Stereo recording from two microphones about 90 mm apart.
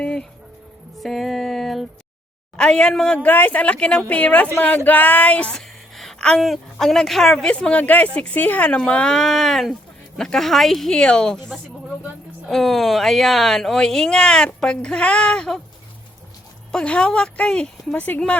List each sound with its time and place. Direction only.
0.0 s music: 10° left (ahead or behind)
2.6 s speech: 10° left (ahead or behind)
5.5 s a woman's voice: 5° left (ahead or behind)
7.5 s speech: 15° left (ahead or behind)
12.5 s speech: centre (ahead or behind)
16.7 s speech: 10° left (ahead or behind)